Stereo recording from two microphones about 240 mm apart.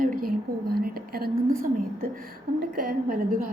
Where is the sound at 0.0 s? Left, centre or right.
Right.